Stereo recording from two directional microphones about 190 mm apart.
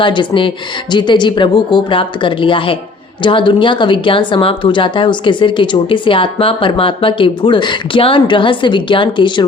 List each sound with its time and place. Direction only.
0.0 s a woman's voice: 25° left (ahead or behind)